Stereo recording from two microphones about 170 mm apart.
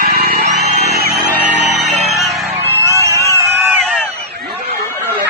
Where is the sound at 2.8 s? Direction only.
20° right (ahead or behind).